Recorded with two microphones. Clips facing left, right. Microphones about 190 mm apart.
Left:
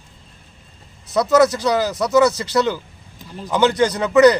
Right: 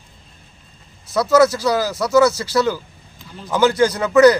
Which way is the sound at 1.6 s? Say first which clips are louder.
Even; 5° right (ahead or behind).